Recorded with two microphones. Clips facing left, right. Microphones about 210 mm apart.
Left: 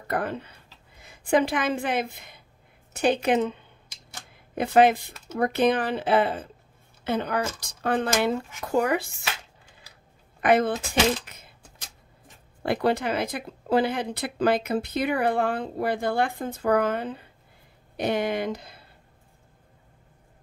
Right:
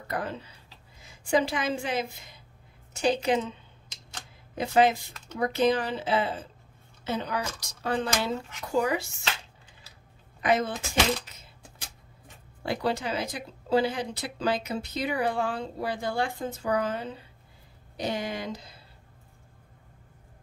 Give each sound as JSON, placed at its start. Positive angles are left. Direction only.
{"t": 0.1, "sound": "a woman's voice", "side_deg": 55}
{"t": 4.6, "sound": "speech", "side_deg": 60}
{"t": 10.4, "sound": "speech", "side_deg": 60}
{"t": 11.2, "sound": "a sound", "side_deg": 55}
{"t": 12.6, "sound": "speech", "side_deg": 60}